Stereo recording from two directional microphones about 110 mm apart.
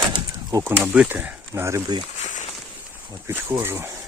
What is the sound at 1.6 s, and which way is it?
Speech, 25° right (ahead or behind).